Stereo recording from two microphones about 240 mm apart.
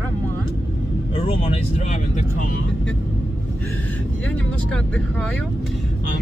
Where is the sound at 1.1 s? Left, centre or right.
Left.